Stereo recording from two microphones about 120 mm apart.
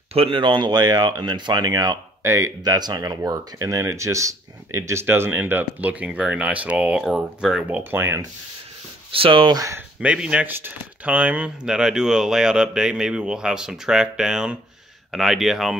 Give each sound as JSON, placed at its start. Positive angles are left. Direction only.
{"t": 0.1, "sound": "speech", "side_deg": -50}
{"t": 9.1, "sound": "speech", "side_deg": -45}
{"t": 9.9, "sound": "speech", "side_deg": -10}